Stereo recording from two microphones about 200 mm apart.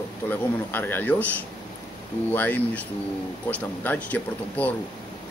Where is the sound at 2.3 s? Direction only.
10° left (ahead or behind).